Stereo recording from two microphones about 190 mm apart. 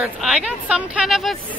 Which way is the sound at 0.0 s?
5° right (ahead or behind).